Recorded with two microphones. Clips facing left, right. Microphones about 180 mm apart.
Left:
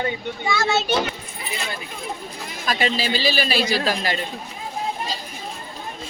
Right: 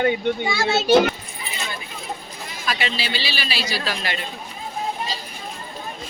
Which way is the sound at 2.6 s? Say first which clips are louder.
Left 4 dB; 45° left (ahead or behind).